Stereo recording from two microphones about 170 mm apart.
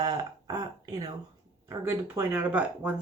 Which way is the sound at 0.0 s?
20° right (ahead or behind).